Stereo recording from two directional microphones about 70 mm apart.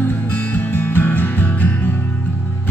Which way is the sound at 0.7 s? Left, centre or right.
Left.